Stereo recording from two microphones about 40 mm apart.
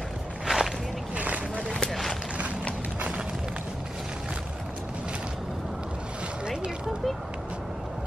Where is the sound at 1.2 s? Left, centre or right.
Right.